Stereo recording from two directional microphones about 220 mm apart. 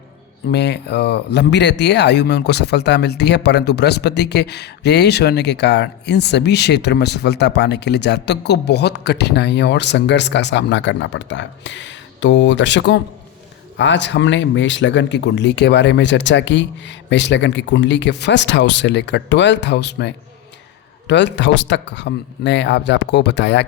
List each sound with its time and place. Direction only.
0.5 s speech: 50° left (ahead or behind)